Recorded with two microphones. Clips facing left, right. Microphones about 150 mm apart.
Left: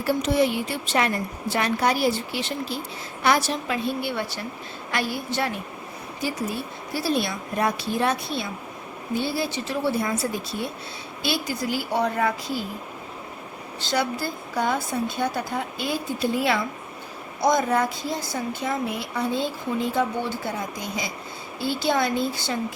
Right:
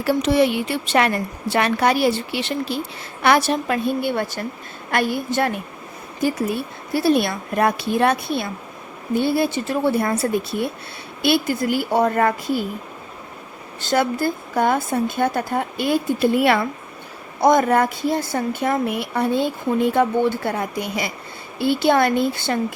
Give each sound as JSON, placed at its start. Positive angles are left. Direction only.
{"t": 0.0, "sound": "a woman's voice", "side_deg": -90}
{"t": 13.8, "sound": "speech", "side_deg": -50}